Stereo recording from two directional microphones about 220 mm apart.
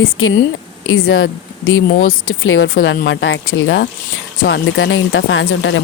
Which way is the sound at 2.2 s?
65° left (ahead or behind).